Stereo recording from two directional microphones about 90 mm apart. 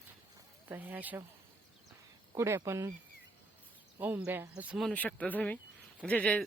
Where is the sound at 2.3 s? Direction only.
30° right (ahead or behind).